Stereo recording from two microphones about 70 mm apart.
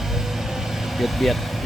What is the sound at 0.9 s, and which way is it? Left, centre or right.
Speech, centre.